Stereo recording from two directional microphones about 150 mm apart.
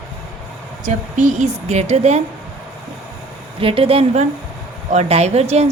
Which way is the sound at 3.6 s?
40° right (ahead or behind).